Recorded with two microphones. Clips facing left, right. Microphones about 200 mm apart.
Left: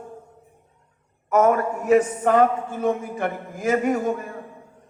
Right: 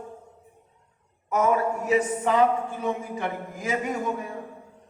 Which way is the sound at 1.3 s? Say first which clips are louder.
Left 4 dB; 50° left (ahead or behind).